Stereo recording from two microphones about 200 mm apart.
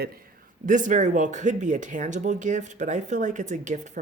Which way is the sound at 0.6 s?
40° right (ahead or behind).